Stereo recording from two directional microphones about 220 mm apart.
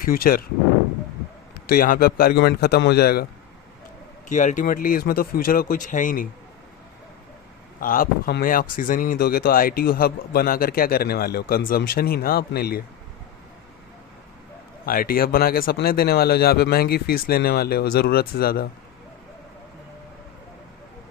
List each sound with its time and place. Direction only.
0.0 s speech: 40° left (ahead or behind)
1.6 s a man's voice: 40° left (ahead or behind)
4.3 s speech: 35° left (ahead or behind)
7.8 s a man's voice: 40° left (ahead or behind)
14.8 s a man's voice: 40° left (ahead or behind)